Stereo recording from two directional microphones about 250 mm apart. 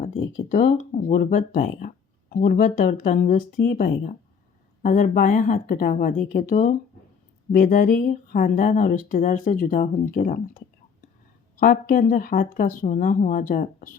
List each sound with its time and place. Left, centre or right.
0.4 s speech: left